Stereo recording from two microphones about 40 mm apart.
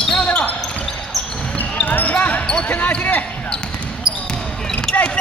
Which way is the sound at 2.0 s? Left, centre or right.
Left.